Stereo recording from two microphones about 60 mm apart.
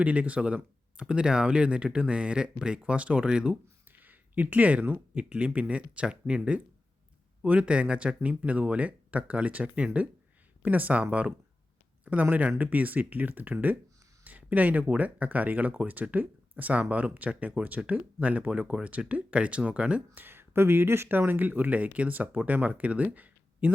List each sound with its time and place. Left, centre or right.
0.0 s speech: right
4.0 s speech: right
20.1 s speech: right